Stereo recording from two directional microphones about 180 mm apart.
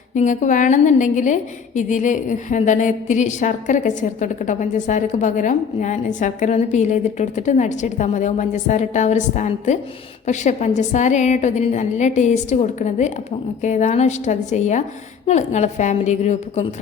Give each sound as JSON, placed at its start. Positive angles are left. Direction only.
{"t": 0.1, "sound": "a woman's voice", "side_deg": 45}